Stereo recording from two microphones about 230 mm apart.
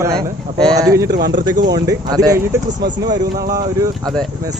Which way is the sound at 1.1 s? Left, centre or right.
Right.